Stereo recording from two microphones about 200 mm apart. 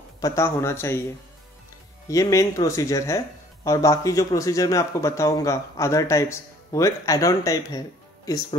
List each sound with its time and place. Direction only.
0.2 s a man's voice: 15° left (ahead or behind)
2.0 s a man's voice: 15° left (ahead or behind)